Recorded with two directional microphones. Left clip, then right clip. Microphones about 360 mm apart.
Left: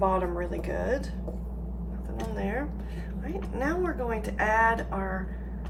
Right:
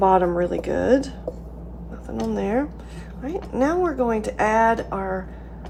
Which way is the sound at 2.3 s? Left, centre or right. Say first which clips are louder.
Right 9 dB; centre.